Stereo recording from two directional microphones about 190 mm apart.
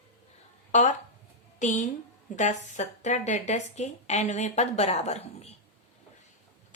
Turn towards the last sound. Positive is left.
turn(degrees=35)  # may be behind; listen again after turning